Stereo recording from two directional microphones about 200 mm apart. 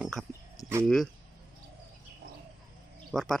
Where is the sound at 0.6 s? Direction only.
15° left (ahead or behind).